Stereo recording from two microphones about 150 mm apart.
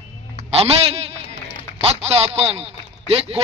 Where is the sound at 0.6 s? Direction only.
40° right (ahead or behind).